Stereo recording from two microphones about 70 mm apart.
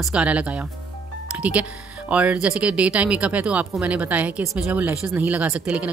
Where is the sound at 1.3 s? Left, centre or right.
Centre.